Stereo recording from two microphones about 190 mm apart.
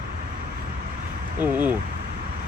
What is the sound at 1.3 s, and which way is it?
Speech, 10° right (ahead or behind).